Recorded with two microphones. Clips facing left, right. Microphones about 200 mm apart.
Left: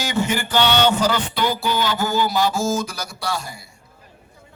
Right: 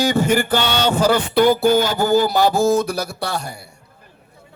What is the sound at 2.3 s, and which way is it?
A man's voice, 60° right (ahead or behind).